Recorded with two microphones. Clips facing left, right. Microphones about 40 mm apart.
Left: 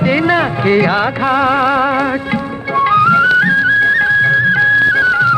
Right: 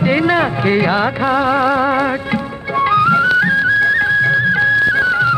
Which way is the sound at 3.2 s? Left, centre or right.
Left.